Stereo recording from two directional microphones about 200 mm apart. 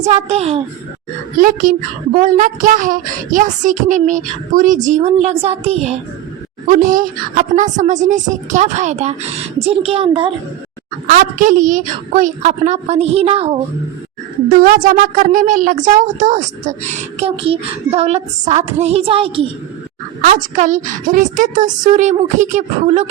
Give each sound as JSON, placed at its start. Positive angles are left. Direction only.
{"t": 0.0, "sound": "speech", "side_deg": -30}
{"t": 1.4, "sound": "speech", "side_deg": -40}
{"t": 6.7, "sound": "speech", "side_deg": -40}
{"t": 11.0, "sound": "speech", "side_deg": -45}
{"t": 14.6, "sound": "speech", "side_deg": -45}
{"t": 20.2, "sound": "speech", "side_deg": -40}